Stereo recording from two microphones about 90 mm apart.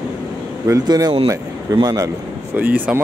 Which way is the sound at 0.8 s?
45° right (ahead or behind).